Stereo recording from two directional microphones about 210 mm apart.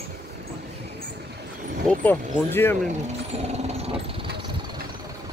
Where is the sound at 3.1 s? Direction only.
30° right (ahead or behind).